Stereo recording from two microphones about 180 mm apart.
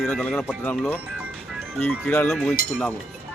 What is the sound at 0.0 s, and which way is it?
Speech, centre (ahead or behind).